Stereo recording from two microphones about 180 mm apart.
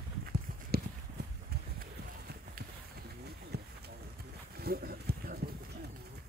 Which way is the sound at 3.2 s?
65° right (ahead or behind).